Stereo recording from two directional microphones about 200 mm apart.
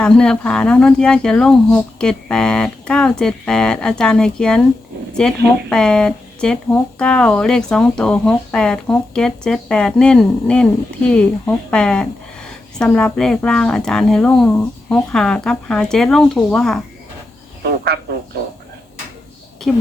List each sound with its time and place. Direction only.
0.0 s speech: 5° left (ahead or behind)
17.6 s speech: 50° right (ahead or behind)
19.7 s speech: 5° left (ahead or behind)